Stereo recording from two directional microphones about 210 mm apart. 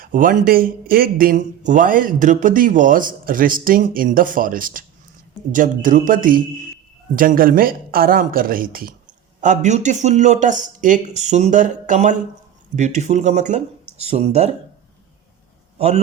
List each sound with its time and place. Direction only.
0.0 s speech: 40° right (ahead or behind)